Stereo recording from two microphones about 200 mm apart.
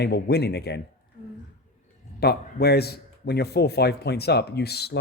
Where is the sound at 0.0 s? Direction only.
55° left (ahead or behind).